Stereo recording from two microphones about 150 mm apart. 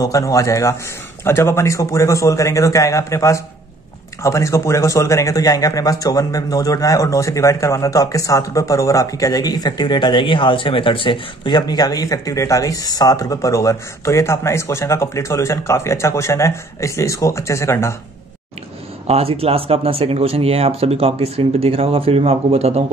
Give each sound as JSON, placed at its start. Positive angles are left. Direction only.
{"t": 0.0, "sound": "speech", "side_deg": 20}
{"t": 19.0, "sound": "speech", "side_deg": -40}